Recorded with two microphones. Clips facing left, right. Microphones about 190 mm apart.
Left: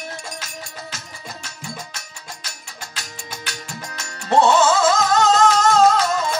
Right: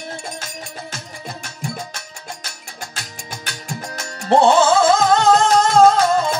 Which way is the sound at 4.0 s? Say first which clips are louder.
Right 2 dB; 30° right (ahead or behind).